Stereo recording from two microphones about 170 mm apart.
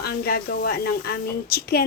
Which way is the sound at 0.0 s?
65° left (ahead or behind).